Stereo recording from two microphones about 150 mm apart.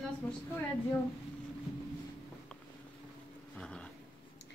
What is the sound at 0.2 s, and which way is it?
Speech, 10° left (ahead or behind).